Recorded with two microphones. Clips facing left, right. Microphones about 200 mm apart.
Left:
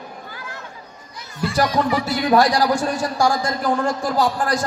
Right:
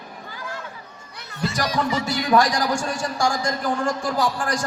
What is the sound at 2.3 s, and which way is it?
A man's voice, 35° left (ahead or behind).